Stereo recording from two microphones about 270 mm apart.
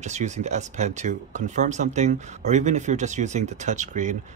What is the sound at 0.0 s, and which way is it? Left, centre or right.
Speech, right.